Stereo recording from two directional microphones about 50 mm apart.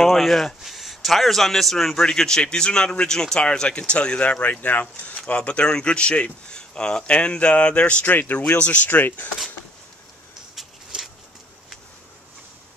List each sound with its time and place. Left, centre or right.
0.0 s a man's voice: centre; by 9.3 s left